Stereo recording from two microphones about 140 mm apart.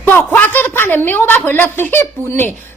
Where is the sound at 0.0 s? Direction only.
15° left (ahead or behind).